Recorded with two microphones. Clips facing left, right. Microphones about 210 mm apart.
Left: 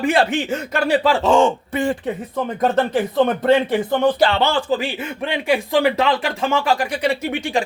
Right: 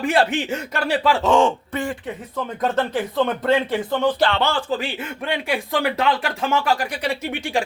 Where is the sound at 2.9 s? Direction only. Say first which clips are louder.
Left 4 dB; 50° left (ahead or behind).